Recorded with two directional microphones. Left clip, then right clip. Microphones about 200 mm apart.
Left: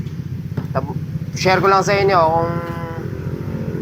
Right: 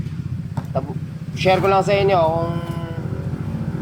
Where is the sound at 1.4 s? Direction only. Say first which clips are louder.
Left 2 dB; 20° right (ahead or behind).